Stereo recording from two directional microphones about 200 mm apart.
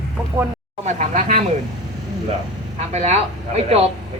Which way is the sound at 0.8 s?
35° right (ahead or behind).